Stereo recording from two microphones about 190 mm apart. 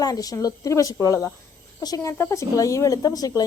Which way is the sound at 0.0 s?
20° left (ahead or behind).